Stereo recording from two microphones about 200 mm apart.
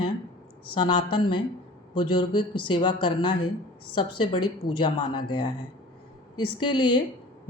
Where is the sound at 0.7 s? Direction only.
25° left (ahead or behind).